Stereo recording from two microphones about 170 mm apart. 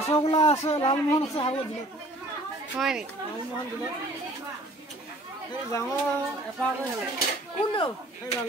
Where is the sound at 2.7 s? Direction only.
5° right (ahead or behind).